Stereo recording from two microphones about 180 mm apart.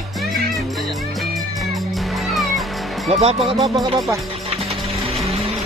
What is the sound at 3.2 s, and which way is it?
Speech, 35° right (ahead or behind).